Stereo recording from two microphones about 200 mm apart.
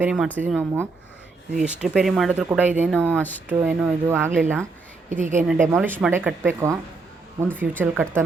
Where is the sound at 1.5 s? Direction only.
5° right (ahead or behind).